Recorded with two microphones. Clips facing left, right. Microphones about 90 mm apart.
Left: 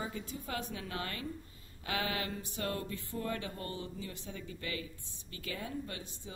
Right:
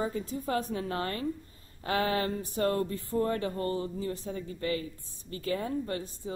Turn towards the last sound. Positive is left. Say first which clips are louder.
# right 9 dB
turn(degrees=-40)  # may be behind; listen again after turning